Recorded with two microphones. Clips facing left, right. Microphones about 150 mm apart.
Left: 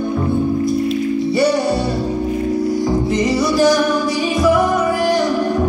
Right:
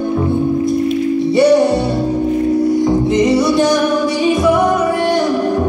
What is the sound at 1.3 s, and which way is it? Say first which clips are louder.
Music: right 7 dB; 25° right (ahead or behind).